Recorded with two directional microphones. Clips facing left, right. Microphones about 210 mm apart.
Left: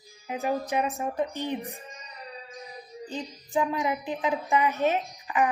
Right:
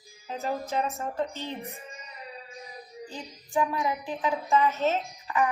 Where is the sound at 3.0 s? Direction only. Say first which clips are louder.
Left 5 dB; 20° left (ahead or behind).